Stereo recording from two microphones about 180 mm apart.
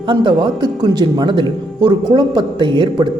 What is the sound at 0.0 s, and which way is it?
Speech, 25° right (ahead or behind).